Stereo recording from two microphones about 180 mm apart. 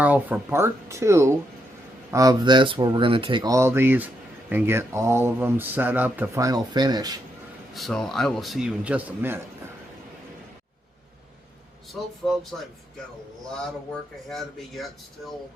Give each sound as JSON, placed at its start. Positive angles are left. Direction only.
{"t": 0.0, "sound": "speech", "side_deg": -10}
{"t": 7.7, "sound": "a man's voice", "side_deg": 0}
{"t": 12.2, "sound": "a man's voice", "side_deg": 0}
{"t": 14.3, "sound": "a man's voice", "side_deg": 0}